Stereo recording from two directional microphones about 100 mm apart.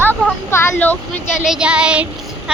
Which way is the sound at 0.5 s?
25° left (ahead or behind).